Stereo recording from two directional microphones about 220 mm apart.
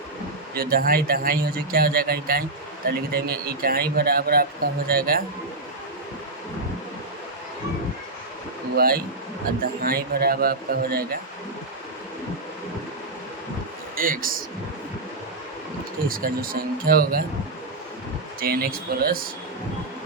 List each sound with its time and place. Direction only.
0.5 s a man's voice: 40° right (ahead or behind)
8.7 s a man's voice: 40° right (ahead or behind)
13.9 s speech: 40° right (ahead or behind)
16.0 s speech: 40° right (ahead or behind)
18.3 s a man's voice: 40° right (ahead or behind)